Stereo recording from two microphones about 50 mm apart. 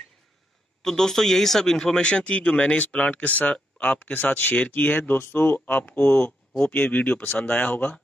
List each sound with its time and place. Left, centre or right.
0.8 s speech: centre; by 7.9 s left